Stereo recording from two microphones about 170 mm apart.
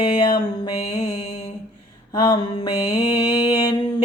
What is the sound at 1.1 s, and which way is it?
Mantra, 40° left (ahead or behind).